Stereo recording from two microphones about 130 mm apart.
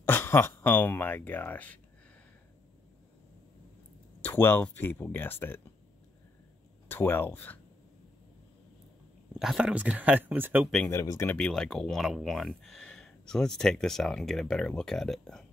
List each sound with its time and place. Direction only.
0.0 s speech: 20° left (ahead or behind)
4.2 s speech: 15° left (ahead or behind)
6.9 s speech: 15° left (ahead or behind)
9.4 s speech: 5° right (ahead or behind)
10.9 s speech: 20° left (ahead or behind)
11.3 s speech: 5° left (ahead or behind)